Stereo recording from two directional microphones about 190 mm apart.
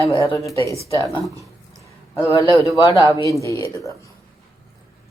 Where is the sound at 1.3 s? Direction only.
15° right (ahead or behind).